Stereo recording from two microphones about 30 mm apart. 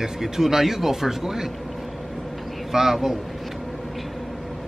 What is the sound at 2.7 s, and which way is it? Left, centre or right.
Speech, centre.